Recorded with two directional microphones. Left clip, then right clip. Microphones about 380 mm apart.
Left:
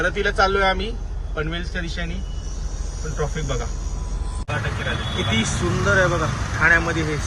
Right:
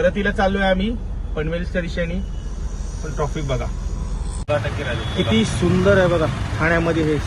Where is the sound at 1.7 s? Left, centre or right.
Centre.